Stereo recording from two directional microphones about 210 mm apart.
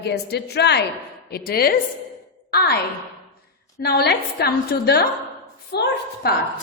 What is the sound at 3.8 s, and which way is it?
A woman's voice, 50° left (ahead or behind).